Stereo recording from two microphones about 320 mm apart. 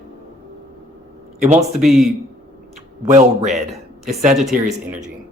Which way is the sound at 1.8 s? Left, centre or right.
Centre.